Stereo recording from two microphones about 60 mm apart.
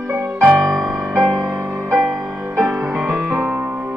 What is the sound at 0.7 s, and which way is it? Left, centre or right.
Music, centre.